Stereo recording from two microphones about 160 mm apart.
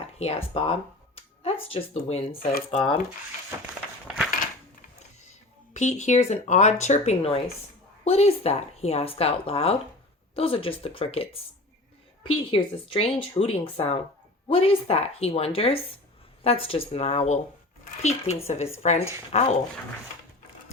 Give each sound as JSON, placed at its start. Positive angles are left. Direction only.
{"t": 0.2, "sound": "speech", "side_deg": 40}
{"t": 5.7, "sound": "speech", "side_deg": 50}